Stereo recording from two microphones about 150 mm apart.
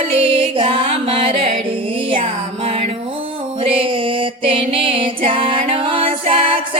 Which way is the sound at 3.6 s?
40° right (ahead or behind).